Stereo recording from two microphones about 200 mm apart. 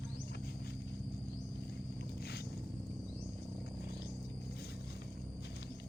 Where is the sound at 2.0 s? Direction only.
50° left (ahead or behind).